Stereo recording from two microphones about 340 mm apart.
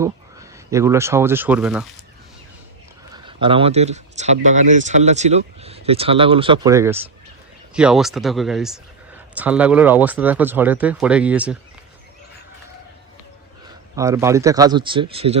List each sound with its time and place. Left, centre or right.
0.7 s speech: centre
3.1 s speech: centre
13.9 s speech: centre